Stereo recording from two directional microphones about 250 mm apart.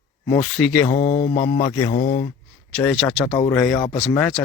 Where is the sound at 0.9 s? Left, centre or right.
Left.